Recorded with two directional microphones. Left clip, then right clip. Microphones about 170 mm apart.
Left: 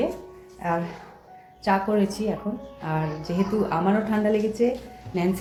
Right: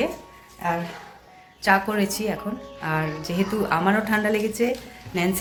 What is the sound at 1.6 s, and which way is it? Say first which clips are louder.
A woman's voice: right 2 dB; centre (ahead or behind).